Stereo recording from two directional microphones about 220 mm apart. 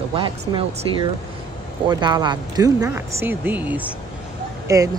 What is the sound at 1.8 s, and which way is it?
Speech, 20° right (ahead or behind).